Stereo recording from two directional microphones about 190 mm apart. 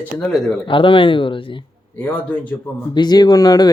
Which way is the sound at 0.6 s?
25° left (ahead or behind).